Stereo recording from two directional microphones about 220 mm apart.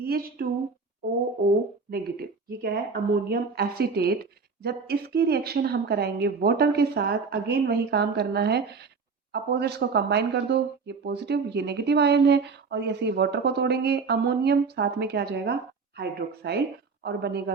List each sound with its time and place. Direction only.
0.0 s a woman's voice: 45° right (ahead or behind)
1.9 s speech: 45° right (ahead or behind)